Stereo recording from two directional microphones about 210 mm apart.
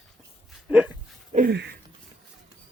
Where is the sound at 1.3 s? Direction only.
50° right (ahead or behind).